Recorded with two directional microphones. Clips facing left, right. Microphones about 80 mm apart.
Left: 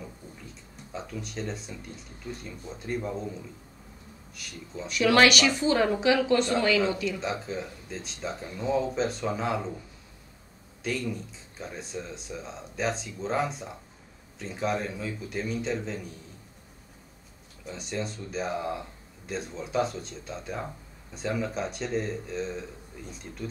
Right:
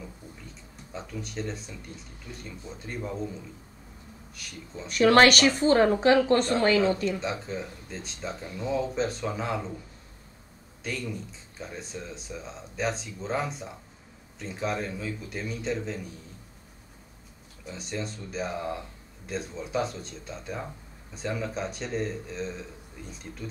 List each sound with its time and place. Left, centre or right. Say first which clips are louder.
0.9 s speech: even; centre
4.4 s speech: left 2 dB; centre
4.8 s speech: right 3 dB; right
7.2 s speech: even; centre
10.8 s speech: left 3 dB; centre
17.6 s speech: left 1 dB; centre